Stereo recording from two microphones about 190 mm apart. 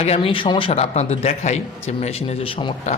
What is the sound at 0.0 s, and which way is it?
A man's voice, 30° left (ahead or behind).